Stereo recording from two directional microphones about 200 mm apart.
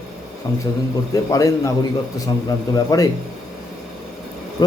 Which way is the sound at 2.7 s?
20° left (ahead or behind).